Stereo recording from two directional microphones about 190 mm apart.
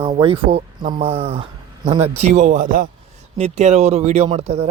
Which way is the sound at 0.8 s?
45° right (ahead or behind).